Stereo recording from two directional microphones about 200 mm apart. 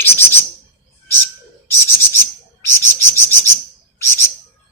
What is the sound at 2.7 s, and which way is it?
Cricket, 15° left (ahead or behind).